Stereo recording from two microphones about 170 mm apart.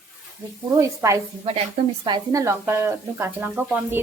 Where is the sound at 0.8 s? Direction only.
20° right (ahead or behind).